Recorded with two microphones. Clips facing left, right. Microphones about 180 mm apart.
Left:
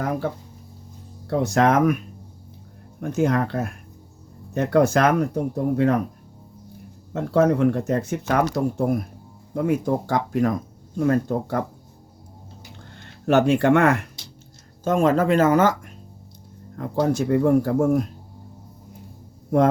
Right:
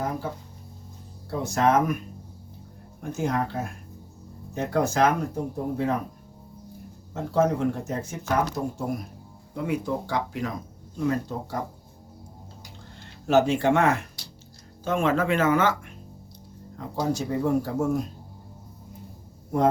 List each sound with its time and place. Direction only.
0.0 s a sound: 70° left (ahead or behind)
1.3 s speech: 70° left (ahead or behind)
3.0 s speech: 65° left (ahead or behind)
7.1 s speech: 70° left (ahead or behind)
13.2 s speech: 60° left (ahead or behind)
14.8 s speech: 40° left (ahead or behind)
16.7 s speech: 60° left (ahead or behind)